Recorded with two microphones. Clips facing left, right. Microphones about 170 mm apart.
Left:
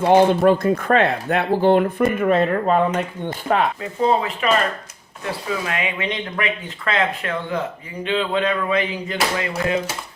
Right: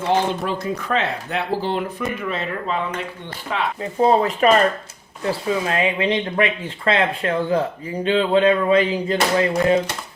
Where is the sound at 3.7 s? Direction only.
40° right (ahead or behind).